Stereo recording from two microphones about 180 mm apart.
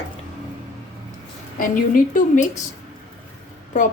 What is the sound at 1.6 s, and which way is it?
Speech, 50° left (ahead or behind).